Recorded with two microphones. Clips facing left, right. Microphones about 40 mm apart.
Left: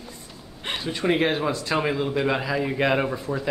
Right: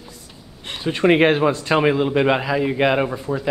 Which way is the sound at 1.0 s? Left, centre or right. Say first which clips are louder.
Right 7 dB; right.